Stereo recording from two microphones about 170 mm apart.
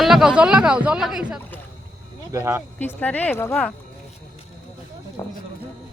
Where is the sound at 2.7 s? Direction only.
10° left (ahead or behind).